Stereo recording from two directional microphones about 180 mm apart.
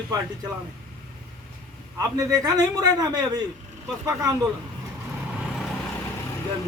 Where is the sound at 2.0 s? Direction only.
20° right (ahead or behind).